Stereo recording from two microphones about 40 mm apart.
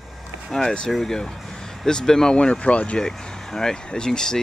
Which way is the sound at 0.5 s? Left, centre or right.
Centre.